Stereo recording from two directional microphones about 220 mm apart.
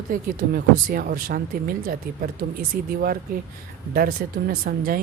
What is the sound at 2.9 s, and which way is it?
Speech, 40° right (ahead or behind).